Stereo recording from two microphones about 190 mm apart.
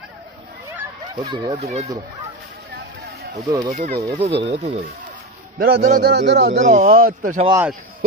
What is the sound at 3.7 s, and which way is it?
Speech, 55° right (ahead or behind).